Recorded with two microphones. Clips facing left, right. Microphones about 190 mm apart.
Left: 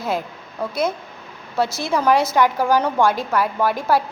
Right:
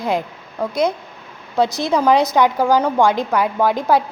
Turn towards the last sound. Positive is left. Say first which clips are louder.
# right 3 dB
turn(degrees=-20)  # may be behind; listen again after turning